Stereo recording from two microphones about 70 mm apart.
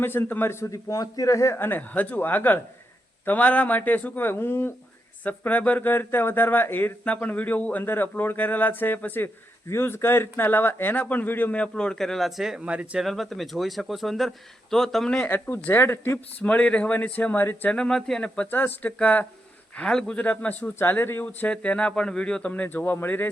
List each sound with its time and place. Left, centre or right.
0.0 s speech: left
0.6 s a man's voice: left
1.5 s speech: left
5.2 s speech: left
9.6 s speech: left
11.7 s speech: centre
13.0 s speech: centre
15.3 s speech: left
16.1 s speech: centre
17.7 s speech: centre
18.3 s speech: left
21.2 s speech: centre
22.8 s speech: left